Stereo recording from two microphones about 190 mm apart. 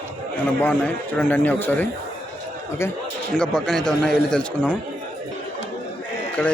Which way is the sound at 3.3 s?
Centre (ahead or behind).